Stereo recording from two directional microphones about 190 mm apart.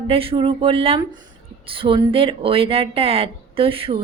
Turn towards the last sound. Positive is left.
turn(degrees=-30)  # may be behind; listen again after turning